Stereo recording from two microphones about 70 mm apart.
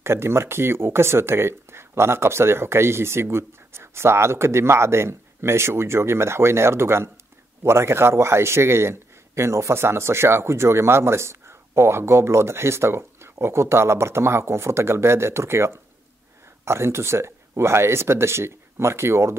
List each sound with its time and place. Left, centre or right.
0.0 s speech: right